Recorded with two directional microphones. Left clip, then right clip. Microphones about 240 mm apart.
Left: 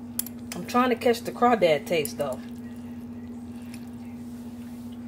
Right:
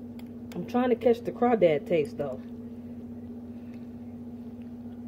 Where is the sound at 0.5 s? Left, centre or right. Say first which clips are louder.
Left 3 dB; right.